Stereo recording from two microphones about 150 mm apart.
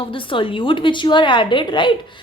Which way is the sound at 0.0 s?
35° left (ahead or behind).